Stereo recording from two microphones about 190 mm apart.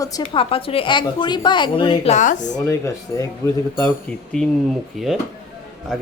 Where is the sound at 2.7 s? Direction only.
15° left (ahead or behind).